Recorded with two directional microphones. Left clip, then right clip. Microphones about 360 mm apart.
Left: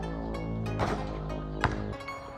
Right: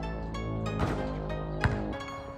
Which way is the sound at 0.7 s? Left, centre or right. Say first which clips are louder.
Left 2 dB; left.